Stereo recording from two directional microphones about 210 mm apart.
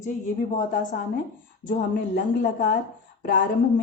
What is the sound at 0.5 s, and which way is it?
Speech, 40° left (ahead or behind).